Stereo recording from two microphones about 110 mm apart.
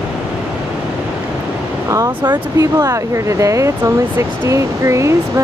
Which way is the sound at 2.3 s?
35° right (ahead or behind).